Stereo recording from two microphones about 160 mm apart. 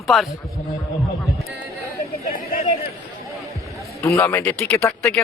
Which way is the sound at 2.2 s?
65° left (ahead or behind).